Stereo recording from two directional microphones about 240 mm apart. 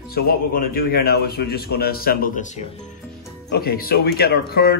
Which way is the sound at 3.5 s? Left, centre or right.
Left.